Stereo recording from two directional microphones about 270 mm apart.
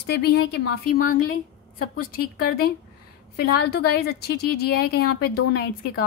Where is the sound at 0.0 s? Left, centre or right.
Left.